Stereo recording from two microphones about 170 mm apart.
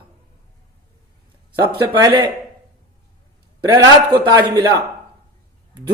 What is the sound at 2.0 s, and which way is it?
Speech, 25° right (ahead or behind).